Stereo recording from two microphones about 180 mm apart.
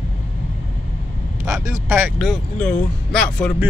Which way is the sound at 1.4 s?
15° right (ahead or behind).